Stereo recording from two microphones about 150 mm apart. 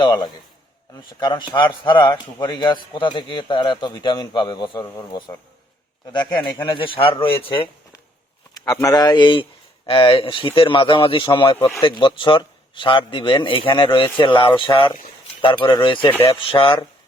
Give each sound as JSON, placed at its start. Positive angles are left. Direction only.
{"t": 0.0, "sound": "speech", "side_deg": 30}
{"t": 6.7, "sound": "speech", "side_deg": 35}
{"t": 8.5, "sound": "speech", "side_deg": 25}